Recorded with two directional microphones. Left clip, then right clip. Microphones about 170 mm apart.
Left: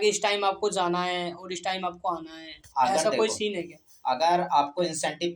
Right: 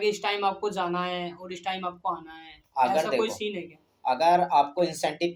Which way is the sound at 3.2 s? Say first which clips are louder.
Left 2 dB; 40° left (ahead or behind).